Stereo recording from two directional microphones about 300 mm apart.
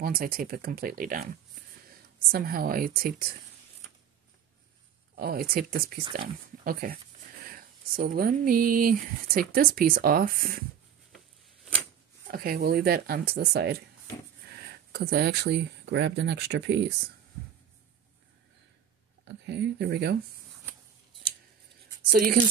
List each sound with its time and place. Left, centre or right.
0.0 s speech: right
2.3 s speech: right
5.1 s speech: right
12.3 s speech: right
19.2 s speech: right
22.1 s speech: right